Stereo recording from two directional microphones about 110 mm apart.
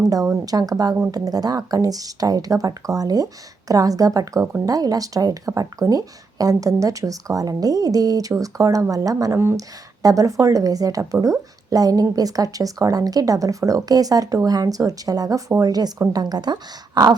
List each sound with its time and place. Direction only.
0.3 s a woman's voice: 35° right (ahead or behind)